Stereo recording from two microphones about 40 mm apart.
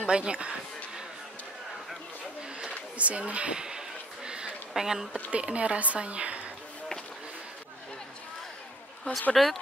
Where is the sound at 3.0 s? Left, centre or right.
Right.